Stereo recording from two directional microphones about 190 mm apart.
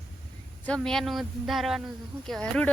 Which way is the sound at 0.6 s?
5° left (ahead or behind).